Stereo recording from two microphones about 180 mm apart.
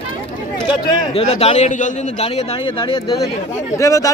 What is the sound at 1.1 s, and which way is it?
A man's voice, 35° left (ahead or behind).